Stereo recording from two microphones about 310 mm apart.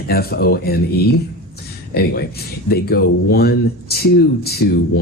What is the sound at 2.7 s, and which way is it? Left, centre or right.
Speech, left.